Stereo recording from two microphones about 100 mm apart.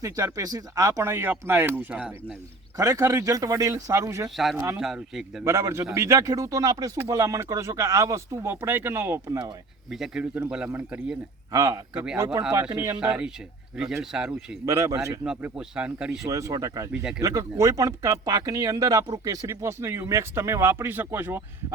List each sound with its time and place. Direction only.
0.0 s a man's voice: 35° right (ahead or behind); by 2.1 s 15° right (ahead or behind)
2.7 s a man's voice: 35° right (ahead or behind)
9.9 s speech: 5° right (ahead or behind)
10.5 s speech: 15° right (ahead or behind)
11.5 s speech: 40° right (ahead or behind)
13.0 s speech: 10° right (ahead or behind)
14.6 s speech: 30° right (ahead or behind)
15.2 s speech: 15° right (ahead or behind)
16.2 s speech: 35° right (ahead or behind)
16.9 s speech: 5° right (ahead or behind)
17.2 s speech: 35° right (ahead or behind)
19.5 s a man's voice: 25° right (ahead or behind)